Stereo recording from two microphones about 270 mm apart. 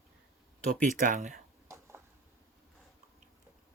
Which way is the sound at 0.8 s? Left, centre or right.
Right.